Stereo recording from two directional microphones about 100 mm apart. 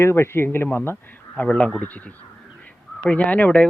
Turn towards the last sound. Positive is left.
turn(degrees=15)  # may be behind; listen again after turning